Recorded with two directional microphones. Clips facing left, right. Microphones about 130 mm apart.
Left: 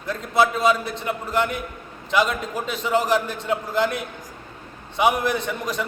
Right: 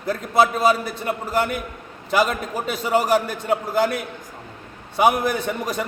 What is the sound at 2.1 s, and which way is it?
A man's voice, 45° right (ahead or behind).